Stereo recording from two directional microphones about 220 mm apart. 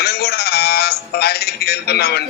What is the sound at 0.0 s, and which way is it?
A man's voice, 45° left (ahead or behind).